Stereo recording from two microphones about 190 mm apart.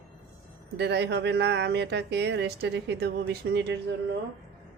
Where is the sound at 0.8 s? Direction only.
65° right (ahead or behind).